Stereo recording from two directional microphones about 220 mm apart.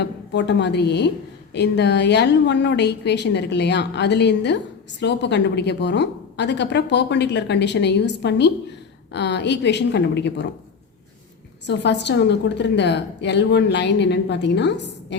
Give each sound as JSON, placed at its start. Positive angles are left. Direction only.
{"t": 0.0, "sound": "a woman's voice", "side_deg": 50}
{"t": 11.6, "sound": "a woman's voice", "side_deg": 50}